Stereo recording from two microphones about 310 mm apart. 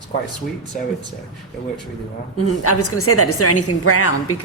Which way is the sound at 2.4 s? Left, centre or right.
Left.